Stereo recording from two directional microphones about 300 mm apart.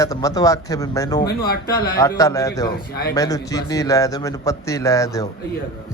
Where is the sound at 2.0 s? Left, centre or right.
Centre.